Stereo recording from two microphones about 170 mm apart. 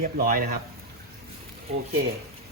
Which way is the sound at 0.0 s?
55° right (ahead or behind).